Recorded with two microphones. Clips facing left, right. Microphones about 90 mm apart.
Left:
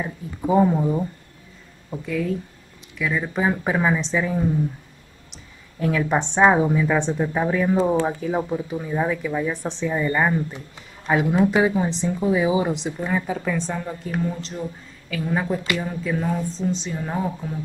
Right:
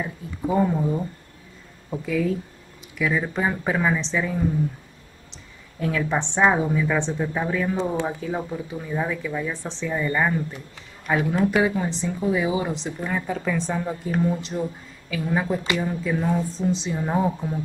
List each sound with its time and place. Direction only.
0.0 s speech: 15° left (ahead or behind)
1.9 s speech: 5° right (ahead or behind)
5.8 s a woman's voice: 5° left (ahead or behind)
6.3 s speech: 15° left (ahead or behind)
13.1 s speech: 5° left (ahead or behind)
13.7 s a woman's voice: 10° right (ahead or behind)